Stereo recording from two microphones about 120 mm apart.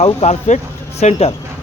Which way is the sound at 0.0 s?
65° left (ahead or behind).